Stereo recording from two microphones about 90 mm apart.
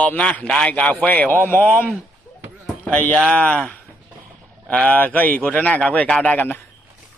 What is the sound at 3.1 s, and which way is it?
Speech, centre (ahead or behind).